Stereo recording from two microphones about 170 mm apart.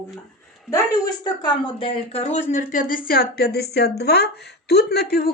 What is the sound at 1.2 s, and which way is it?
Speech, 25° left (ahead or behind).